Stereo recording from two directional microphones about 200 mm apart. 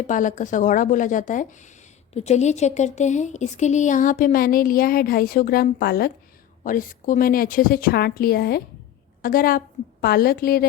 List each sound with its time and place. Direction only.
0.1 s a woman's voice: 40° left (ahead or behind)